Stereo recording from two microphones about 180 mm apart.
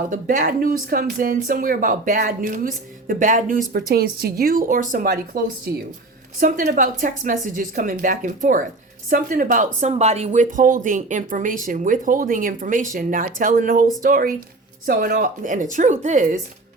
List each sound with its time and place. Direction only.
0.1 s speech: 45° right (ahead or behind)